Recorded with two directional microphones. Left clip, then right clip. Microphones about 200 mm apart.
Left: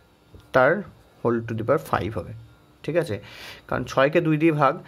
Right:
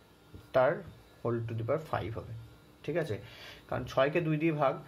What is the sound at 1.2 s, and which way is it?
Speech, 55° left (ahead or behind).